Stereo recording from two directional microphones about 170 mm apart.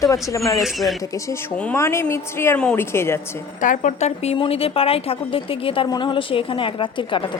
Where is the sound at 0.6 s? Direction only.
Centre (ahead or behind).